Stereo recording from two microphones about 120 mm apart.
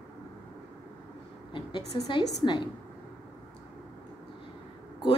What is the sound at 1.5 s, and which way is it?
A woman's voice, 40° left (ahead or behind).